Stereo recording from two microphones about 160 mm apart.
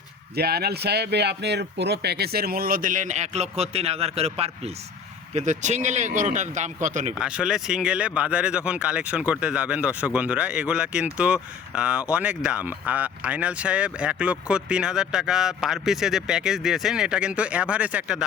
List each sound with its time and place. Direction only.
0.3 s speech: 80° right; by 7.1 s 50° right (ahead or behind)
7.2 s speech: 5° right (ahead or behind)